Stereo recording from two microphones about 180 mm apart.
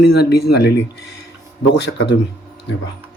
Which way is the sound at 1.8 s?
75° left (ahead or behind).